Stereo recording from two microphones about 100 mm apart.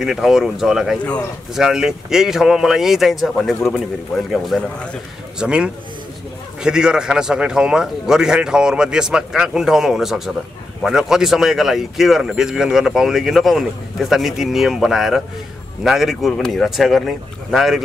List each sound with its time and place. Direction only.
0.0 s a man's voice: 5° right (ahead or behind)